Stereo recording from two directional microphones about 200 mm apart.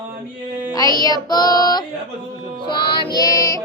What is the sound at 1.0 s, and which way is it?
Speech, 20° left (ahead or behind).